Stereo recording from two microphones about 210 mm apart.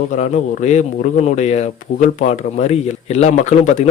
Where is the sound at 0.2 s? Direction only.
35° left (ahead or behind).